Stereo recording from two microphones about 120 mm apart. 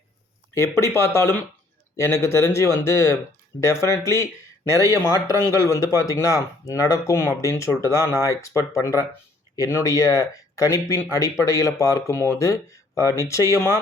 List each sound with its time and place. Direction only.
0.8 s speech: 25° left (ahead or behind)